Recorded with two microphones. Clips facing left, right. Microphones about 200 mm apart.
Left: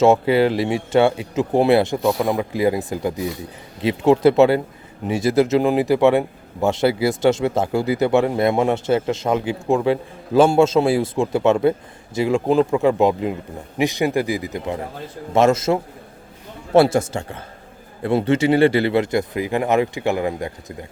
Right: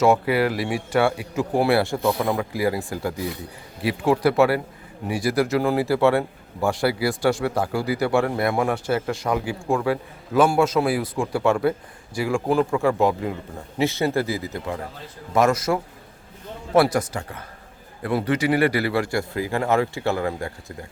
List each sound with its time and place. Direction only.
0.0 s a man's voice: 25° left (ahead or behind)